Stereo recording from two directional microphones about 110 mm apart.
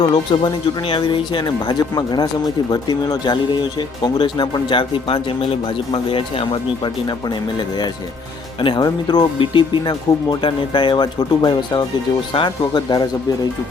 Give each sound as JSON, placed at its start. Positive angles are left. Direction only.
{"t": 0.0, "sound": "speech", "side_deg": 45}
{"t": 8.6, "sound": "speech", "side_deg": 40}